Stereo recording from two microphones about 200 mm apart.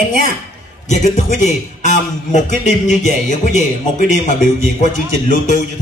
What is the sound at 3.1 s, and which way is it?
Speech, 40° left (ahead or behind).